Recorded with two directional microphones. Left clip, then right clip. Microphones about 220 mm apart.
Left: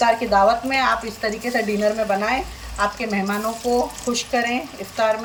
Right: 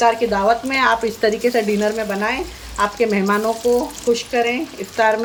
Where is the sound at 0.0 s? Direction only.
10° right (ahead or behind).